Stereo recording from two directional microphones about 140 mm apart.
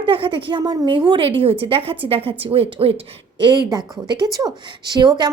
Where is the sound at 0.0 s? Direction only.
35° right (ahead or behind).